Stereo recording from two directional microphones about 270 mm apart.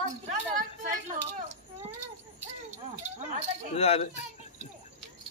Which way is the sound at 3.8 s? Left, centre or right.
Left.